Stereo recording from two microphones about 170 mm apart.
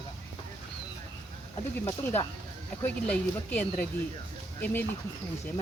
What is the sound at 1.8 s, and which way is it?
Speech, 10° left (ahead or behind).